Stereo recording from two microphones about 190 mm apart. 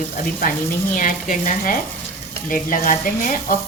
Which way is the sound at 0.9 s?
45° left (ahead or behind).